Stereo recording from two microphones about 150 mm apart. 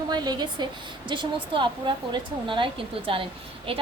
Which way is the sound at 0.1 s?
30° right (ahead or behind).